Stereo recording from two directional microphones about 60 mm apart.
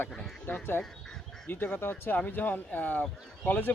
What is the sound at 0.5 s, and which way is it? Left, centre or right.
Speech, left.